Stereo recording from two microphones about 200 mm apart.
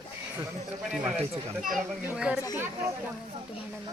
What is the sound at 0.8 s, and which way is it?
Speech, 5° right (ahead or behind).